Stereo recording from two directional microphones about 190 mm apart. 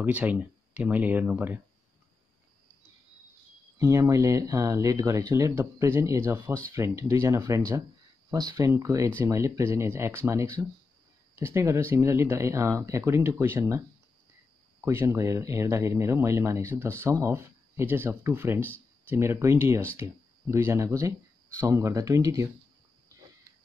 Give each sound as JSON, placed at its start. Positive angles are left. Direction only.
{"t": 0.0, "sound": "speech", "side_deg": -10}
{"t": 3.7, "sound": "speech", "side_deg": -15}
{"t": 14.9, "sound": "speech", "side_deg": -15}